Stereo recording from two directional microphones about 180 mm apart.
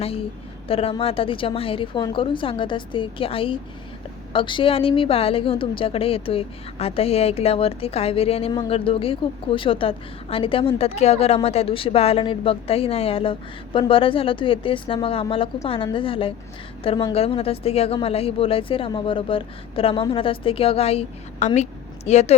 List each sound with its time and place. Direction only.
0.7 s a woman's voice: 30° left (ahead or behind)